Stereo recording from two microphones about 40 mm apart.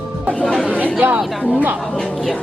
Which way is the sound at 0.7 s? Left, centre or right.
Left.